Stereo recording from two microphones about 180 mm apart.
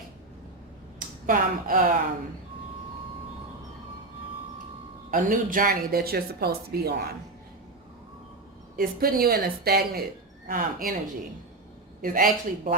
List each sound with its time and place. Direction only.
0.9 s speech: 50° right (ahead or behind)
5.1 s speech: 50° right (ahead or behind)
8.7 s speech: 55° right (ahead or behind)
12.0 s speech: 50° right (ahead or behind)